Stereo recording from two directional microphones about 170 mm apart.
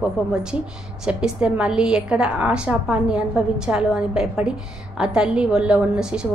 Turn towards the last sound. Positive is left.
turn(degrees=-5)  # may be behind; listen again after turning